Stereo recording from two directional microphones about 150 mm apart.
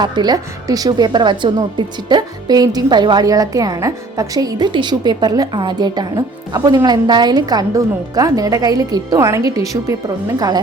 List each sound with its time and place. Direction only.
0.0 s a woman's voice: 25° right (ahead or behind)